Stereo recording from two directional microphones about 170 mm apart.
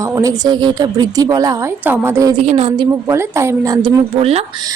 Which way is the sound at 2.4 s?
35° right (ahead or behind).